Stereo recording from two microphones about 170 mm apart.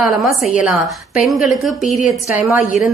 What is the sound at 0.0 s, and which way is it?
A woman's voice, centre (ahead or behind).